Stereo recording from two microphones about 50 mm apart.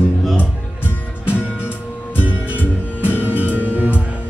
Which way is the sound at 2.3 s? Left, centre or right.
Right.